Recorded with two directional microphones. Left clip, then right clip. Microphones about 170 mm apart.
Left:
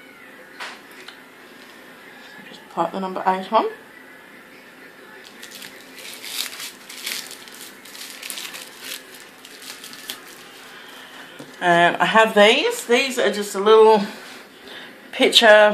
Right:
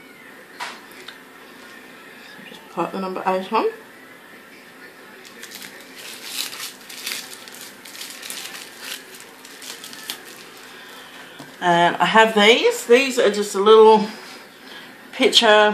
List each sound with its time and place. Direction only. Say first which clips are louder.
2.7 s speech: left 2 dB; 25° left (ahead or behind)
11.6 s speech: left 1 dB; 30° left (ahead or behind)
15.1 s a woman's voice: left 2 dB; 35° left (ahead or behind)